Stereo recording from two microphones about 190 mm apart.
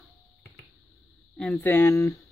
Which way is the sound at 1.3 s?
5° left (ahead or behind).